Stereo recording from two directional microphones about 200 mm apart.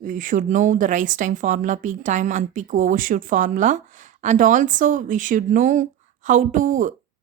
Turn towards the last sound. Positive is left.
turn(degrees=-40)  # may be behind; listen again after turning